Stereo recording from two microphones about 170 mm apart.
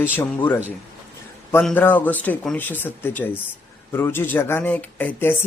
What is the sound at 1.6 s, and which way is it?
Speech, 10° left (ahead or behind).